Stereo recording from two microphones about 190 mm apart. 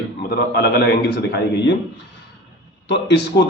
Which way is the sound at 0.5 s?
60° left (ahead or behind).